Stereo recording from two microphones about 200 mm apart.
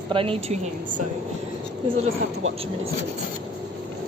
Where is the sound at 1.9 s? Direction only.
30° right (ahead or behind).